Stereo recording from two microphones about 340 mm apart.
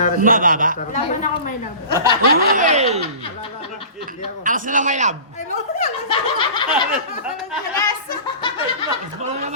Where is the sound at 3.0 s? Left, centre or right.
Centre.